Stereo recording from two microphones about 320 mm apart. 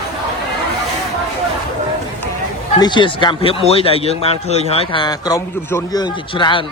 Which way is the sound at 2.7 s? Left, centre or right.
Centre.